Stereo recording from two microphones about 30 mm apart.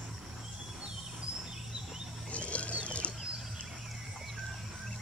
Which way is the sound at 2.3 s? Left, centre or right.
Left.